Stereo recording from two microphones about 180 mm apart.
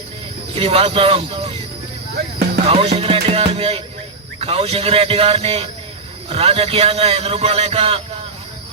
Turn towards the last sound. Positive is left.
turn(degrees=-35)  # may be behind; listen again after turning